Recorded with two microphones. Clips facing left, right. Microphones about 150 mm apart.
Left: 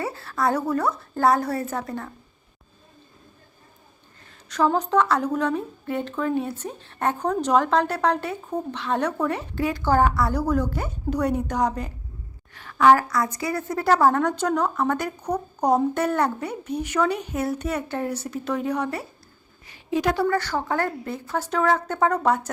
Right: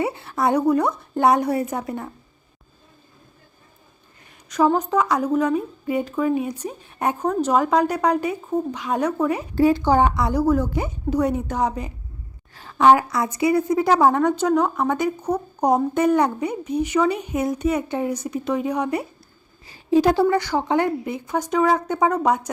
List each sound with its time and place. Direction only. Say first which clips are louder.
0.0 s speech: right 3 dB; 20° right (ahead or behind)
4.5 s speech: right 2 dB; 10° right (ahead or behind)
9.6 s speech: right 11 dB; 35° right (ahead or behind)
9.8 s speech: right 2 dB; 15° right (ahead or behind)
12.5 s a sound: right 2 dB; 25° right (ahead or behind)
12.9 s speech: right 2 dB; 20° right (ahead or behind)
19.6 s a sound: right 6 dB; 30° right (ahead or behind)
20.2 s speech: right 4 dB; 15° right (ahead or behind)